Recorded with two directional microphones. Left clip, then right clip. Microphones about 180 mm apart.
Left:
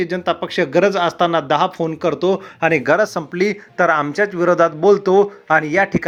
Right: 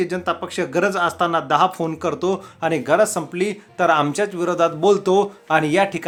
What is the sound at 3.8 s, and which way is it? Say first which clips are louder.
Speech: left 2 dB; 20° left (ahead or behind).